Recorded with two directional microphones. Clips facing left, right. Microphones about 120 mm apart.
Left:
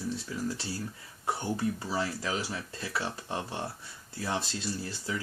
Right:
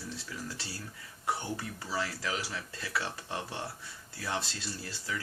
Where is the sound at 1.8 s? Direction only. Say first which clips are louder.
Left 3 dB; 25° left (ahead or behind).